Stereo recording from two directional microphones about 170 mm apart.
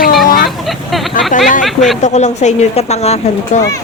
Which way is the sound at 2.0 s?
40° left (ahead or behind).